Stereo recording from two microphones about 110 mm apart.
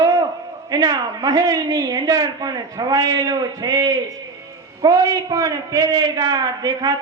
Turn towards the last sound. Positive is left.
turn(degrees=-35)  # may be behind; listen again after turning